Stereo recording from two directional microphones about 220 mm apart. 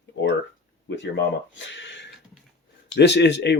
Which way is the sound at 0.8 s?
55° left (ahead or behind).